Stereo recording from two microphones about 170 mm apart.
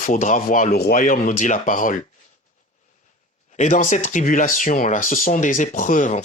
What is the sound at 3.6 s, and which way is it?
Speech, 45° left (ahead or behind).